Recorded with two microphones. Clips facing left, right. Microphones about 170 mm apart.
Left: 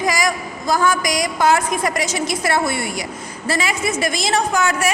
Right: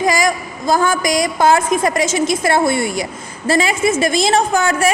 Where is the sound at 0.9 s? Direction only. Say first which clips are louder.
Right 3 dB; 25° right (ahead or behind).